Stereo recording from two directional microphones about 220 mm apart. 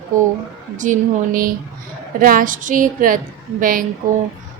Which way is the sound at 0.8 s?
35° right (ahead or behind).